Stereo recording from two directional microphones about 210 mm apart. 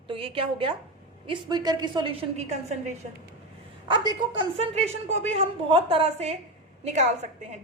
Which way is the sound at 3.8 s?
20° right (ahead or behind).